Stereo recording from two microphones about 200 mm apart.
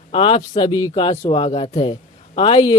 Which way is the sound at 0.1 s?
25° left (ahead or behind).